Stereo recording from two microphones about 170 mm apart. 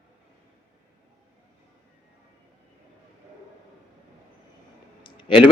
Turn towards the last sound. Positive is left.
turn(degrees=30)  # may be behind; listen again after turning